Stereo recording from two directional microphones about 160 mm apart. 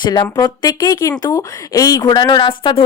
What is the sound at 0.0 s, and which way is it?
A woman's voice, 25° left (ahead or behind).